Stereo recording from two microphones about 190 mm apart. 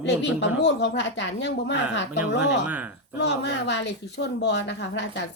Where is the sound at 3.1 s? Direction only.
65° left (ahead or behind).